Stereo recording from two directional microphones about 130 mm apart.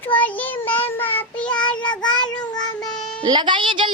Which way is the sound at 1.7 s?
35° left (ahead or behind).